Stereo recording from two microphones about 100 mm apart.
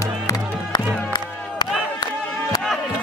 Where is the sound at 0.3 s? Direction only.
40° left (ahead or behind).